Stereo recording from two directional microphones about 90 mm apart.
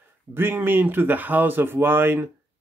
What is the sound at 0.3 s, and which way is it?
Speech, 25° right (ahead or behind).